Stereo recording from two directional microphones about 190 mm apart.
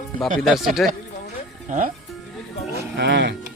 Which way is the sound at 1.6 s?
40° right (ahead or behind).